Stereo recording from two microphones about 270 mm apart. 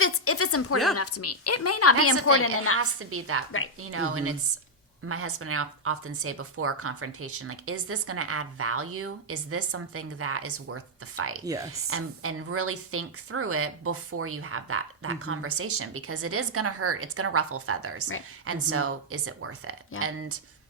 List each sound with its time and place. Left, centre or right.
0.0 s a sound: left
0.9 s a woman's voice: left
2.7 s a woman's voice: right
11.4 s a woman's voice: centre
11.7 s a woman's voice: right